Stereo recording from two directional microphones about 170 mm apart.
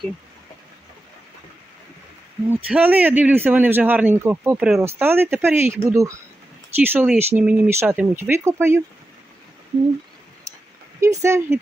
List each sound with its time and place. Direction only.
2.5 s a man's voice: 10° right (ahead or behind)
10.5 s a sound: 20° right (ahead or behind)
11.0 s speech: 15° right (ahead or behind)